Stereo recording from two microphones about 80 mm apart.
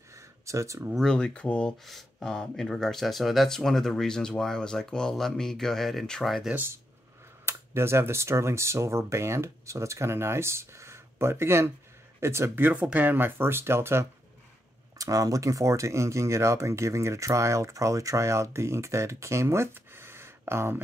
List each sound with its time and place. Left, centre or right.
0.1 s a sound: right
0.9 s speech: centre
1.9 s speech: centre
6.5 s speech: right
15.0 s speech: right